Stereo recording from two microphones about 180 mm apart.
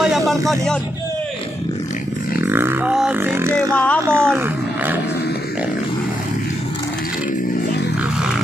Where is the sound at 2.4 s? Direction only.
10° right (ahead or behind).